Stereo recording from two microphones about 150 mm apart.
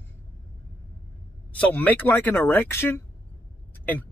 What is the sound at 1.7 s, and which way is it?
Speech, 10° left (ahead or behind).